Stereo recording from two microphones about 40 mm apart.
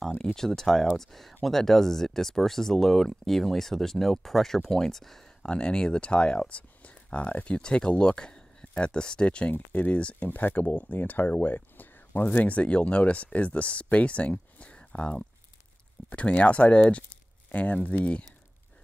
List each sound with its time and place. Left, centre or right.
0.2 s speech: centre
5.4 s speech: left
9.5 s speech: left
10.3 s speech: left
12.4 s speech: left